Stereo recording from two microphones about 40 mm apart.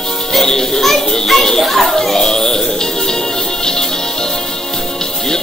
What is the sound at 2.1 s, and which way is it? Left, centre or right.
Music, centre.